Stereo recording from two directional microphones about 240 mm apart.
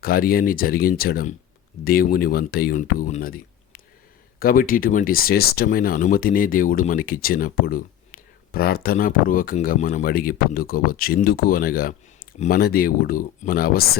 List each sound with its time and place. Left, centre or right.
0.0 s speech: left